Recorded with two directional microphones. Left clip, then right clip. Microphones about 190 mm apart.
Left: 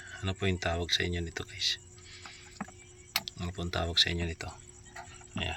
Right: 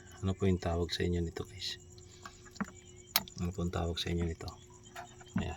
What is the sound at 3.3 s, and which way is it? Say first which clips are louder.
Speech: left 2 dB; 10° right (ahead or behind).